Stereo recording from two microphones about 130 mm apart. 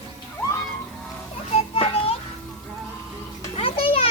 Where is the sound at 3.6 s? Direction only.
45° left (ahead or behind).